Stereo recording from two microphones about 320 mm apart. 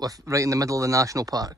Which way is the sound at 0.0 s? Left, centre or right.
Centre.